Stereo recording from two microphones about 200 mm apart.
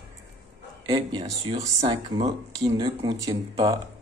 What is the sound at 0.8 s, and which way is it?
Speech, 20° right (ahead or behind).